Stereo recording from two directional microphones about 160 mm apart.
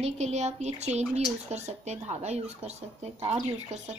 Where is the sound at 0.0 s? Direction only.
45° right (ahead or behind).